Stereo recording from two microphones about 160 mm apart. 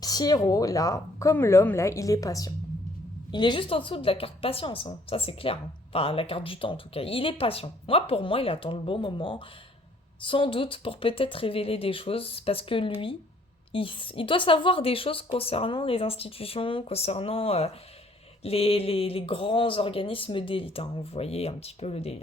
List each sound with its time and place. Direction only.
0.0 s a woman's voice: 25° left (ahead or behind); by 22.2 s 40° left (ahead or behind)